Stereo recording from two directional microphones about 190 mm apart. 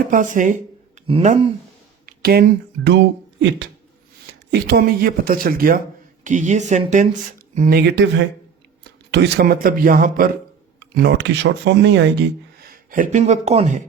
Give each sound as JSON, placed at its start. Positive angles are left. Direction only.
{"t": 0.1, "sound": "speech", "side_deg": -45}
{"t": 2.0, "sound": "speech", "side_deg": -55}
{"t": 4.5, "sound": "speech", "side_deg": -55}
{"t": 7.8, "sound": "speech", "side_deg": -65}
{"t": 10.8, "sound": "speech", "side_deg": -60}
{"t": 12.9, "sound": "speech", "side_deg": -45}